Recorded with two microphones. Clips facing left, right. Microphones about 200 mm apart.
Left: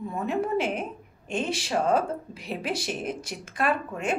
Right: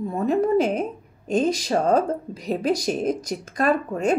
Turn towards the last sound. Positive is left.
turn(degrees=-40)  # may be behind; listen again after turning